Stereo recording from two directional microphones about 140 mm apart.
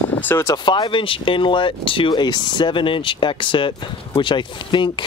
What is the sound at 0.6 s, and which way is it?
Speech, 35° left (ahead or behind).